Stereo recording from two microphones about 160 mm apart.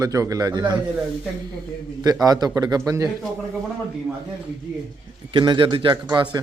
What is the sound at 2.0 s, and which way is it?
Speech, 25° right (ahead or behind).